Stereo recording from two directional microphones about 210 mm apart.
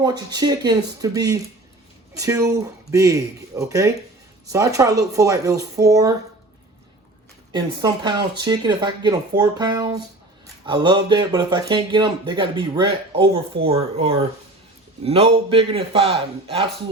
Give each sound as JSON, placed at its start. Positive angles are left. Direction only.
{"t": 0.3, "sound": "speech", "side_deg": -20}
{"t": 7.5, "sound": "speech", "side_deg": -20}